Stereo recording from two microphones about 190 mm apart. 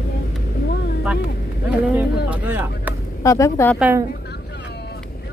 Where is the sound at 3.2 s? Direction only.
15° left (ahead or behind).